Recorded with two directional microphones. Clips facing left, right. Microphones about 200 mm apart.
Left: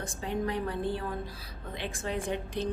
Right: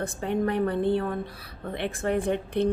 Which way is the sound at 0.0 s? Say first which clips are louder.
Right 6 dB; 60° right (ahead or behind).